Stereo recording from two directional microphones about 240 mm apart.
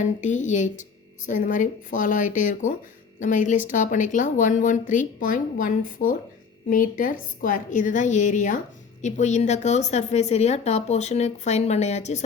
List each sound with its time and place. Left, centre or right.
0.0 s a woman's voice: left